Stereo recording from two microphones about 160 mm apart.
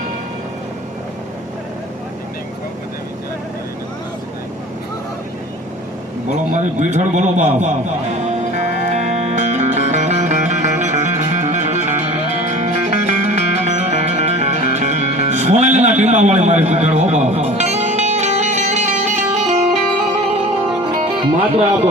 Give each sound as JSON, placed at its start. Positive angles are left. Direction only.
{"t": 6.3, "sound": "a man's voice", "side_deg": -50}
{"t": 8.3, "sound": "music", "side_deg": -45}
{"t": 21.2, "sound": "speech", "side_deg": -30}